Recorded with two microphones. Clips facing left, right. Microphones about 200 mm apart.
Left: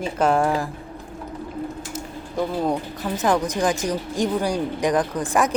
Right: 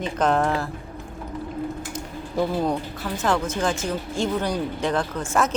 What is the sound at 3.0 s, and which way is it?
Speech, 15° left (ahead or behind).